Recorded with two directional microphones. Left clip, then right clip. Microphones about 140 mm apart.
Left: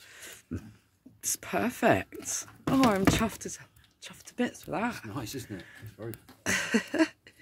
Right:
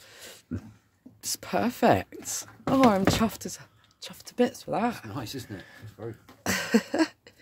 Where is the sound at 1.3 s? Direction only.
20° right (ahead or behind).